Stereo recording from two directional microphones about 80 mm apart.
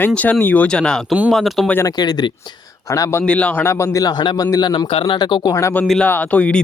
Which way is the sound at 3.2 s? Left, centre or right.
Centre.